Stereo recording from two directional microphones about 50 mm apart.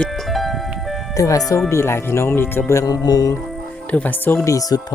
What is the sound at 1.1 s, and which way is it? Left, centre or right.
Speech, left.